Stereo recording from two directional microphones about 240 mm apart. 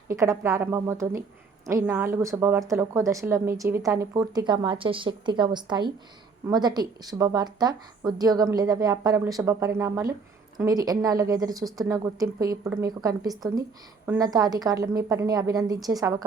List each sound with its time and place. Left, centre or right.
0.1 s a woman's voice: centre